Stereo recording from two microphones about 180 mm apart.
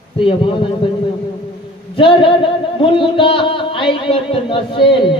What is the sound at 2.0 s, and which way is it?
Speech, 30° left (ahead or behind).